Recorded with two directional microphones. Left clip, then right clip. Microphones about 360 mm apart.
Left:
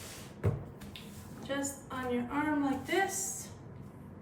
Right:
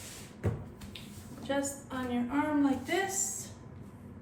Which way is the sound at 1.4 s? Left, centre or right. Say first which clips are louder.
Right 3 dB; centre.